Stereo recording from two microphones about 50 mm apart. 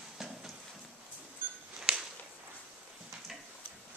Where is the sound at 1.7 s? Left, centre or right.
Centre.